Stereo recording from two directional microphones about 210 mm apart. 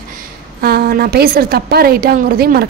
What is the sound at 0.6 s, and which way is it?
A woman's voice, 45° right (ahead or behind).